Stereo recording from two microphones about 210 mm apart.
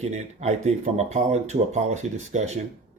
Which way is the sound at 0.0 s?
35° right (ahead or behind).